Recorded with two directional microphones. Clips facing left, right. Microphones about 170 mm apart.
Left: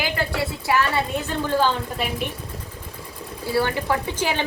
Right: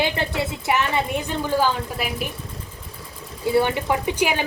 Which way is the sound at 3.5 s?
20° right (ahead or behind).